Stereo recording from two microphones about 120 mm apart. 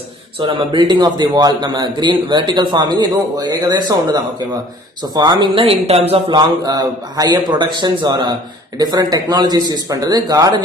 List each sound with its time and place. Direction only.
0.5 s a man's voice: 40° right (ahead or behind)
5.6 s speech: 60° right (ahead or behind)
6.3 s a man's voice: 30° right (ahead or behind)